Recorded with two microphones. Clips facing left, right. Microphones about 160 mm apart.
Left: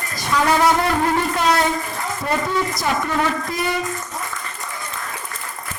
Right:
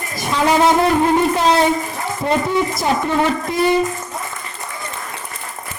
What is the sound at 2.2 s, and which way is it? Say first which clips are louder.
Speech: right 5 dB; 20° right (ahead or behind).